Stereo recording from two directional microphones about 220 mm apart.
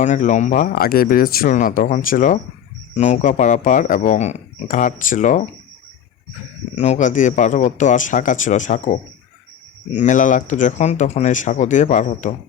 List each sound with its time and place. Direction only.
0.0 s speech: 35° left (ahead or behind)
6.7 s speech: 30° left (ahead or behind)